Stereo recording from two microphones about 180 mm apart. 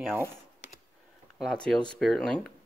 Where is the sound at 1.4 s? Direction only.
Centre (ahead or behind).